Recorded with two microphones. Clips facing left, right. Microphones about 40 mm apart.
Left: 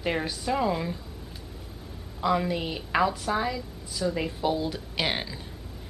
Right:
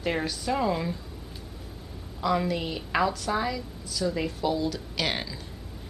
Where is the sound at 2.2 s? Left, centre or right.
Centre.